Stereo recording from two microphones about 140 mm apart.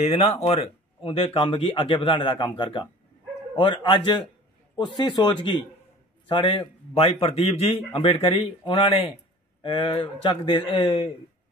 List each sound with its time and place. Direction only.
0.0 s speech: 50° left (ahead or behind)